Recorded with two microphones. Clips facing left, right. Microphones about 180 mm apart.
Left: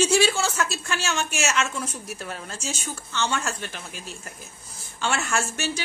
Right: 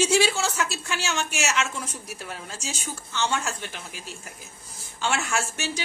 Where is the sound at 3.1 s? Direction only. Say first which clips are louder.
Even; 15° right (ahead or behind).